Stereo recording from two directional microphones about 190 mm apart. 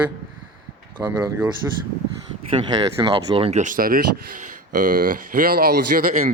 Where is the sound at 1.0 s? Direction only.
5° right (ahead or behind).